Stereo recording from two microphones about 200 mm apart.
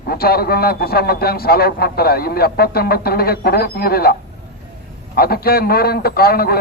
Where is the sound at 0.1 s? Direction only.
50° left (ahead or behind).